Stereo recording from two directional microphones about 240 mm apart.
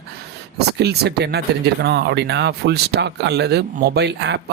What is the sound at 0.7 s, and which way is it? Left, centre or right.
Speech, right.